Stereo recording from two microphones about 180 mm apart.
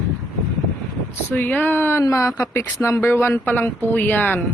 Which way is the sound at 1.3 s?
10° left (ahead or behind).